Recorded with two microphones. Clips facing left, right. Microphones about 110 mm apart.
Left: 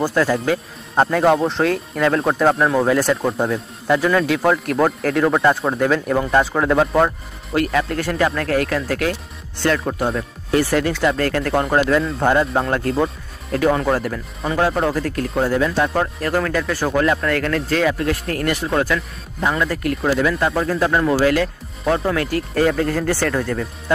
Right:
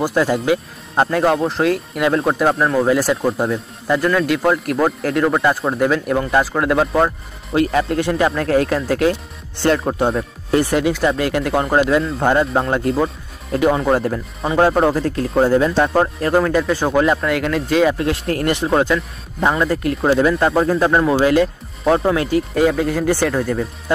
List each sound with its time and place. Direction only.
0.0 s speech: 15° right (ahead or behind)
0.9 s speech: centre (ahead or behind)
7.5 s speech: 20° right (ahead or behind)
13.8 s speech: 25° right (ahead or behind)
17.9 s speech: 25° right (ahead or behind)
22.5 s speech: 10° right (ahead or behind)